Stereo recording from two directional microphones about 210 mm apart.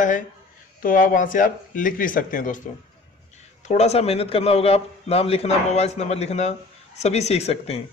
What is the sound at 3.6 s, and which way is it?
A man's voice, 30° left (ahead or behind).